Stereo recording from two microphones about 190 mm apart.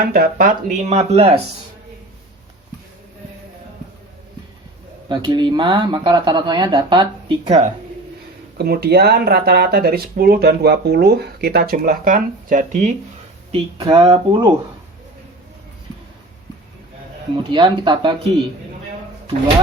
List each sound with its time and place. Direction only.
0.0 s speech: 50° right (ahead or behind); by 1.3 s 35° right (ahead or behind)
5.0 s speech: 20° right (ahead or behind)
8.5 s speech: 55° right (ahead or behind); by 12.9 s 40° right (ahead or behind)
13.5 s speech: 30° right (ahead or behind)
17.3 s speech: 25° right (ahead or behind)